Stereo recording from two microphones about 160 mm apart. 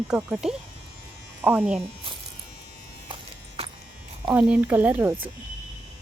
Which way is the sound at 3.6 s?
40° right (ahead or behind).